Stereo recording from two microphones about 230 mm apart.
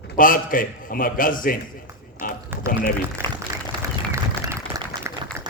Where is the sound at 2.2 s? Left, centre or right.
Left.